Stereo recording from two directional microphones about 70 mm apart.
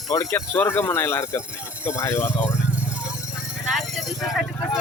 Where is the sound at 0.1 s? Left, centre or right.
Left.